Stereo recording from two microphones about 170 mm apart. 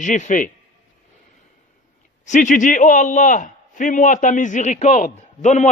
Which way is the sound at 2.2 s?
45° left (ahead or behind).